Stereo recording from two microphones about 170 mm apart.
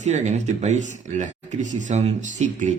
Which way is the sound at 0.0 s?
45° right (ahead or behind).